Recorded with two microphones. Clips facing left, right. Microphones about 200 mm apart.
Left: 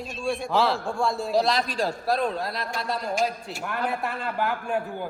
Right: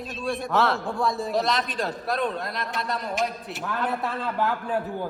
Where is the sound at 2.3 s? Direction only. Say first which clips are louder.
Left 1 dB; 30° left (ahead or behind).